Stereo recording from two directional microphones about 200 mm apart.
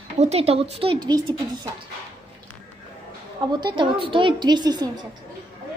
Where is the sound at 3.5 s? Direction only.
25° right (ahead or behind).